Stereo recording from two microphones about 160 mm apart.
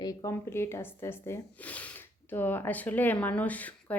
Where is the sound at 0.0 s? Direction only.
20° left (ahead or behind).